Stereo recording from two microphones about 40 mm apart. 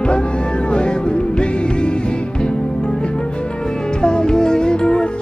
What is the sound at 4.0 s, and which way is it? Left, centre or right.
Music, centre.